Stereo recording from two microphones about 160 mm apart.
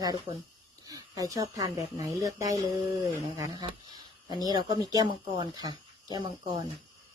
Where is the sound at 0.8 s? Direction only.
20° right (ahead or behind).